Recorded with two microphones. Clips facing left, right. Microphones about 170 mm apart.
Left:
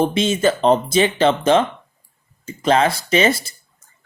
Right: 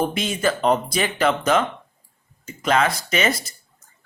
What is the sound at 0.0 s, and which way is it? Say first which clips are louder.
Speech: left 5 dB; 25° left (ahead or behind).